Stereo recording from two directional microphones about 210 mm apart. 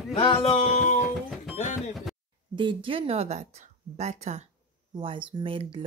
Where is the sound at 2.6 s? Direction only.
25° right (ahead or behind).